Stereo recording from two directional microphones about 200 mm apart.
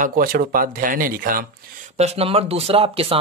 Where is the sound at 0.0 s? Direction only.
45° right (ahead or behind).